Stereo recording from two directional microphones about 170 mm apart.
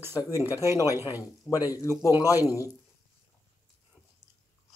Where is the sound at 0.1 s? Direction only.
20° left (ahead or behind).